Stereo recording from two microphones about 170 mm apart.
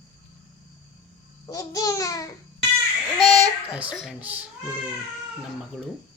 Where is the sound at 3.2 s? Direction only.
5° right (ahead or behind).